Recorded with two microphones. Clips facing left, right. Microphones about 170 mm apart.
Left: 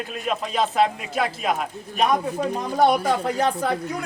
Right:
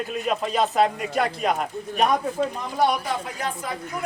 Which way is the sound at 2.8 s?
50° left (ahead or behind).